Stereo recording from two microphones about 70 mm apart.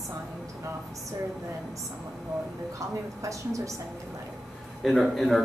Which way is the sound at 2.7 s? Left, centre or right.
Right.